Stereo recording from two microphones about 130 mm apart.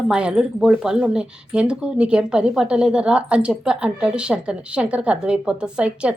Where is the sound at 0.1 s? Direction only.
5° right (ahead or behind).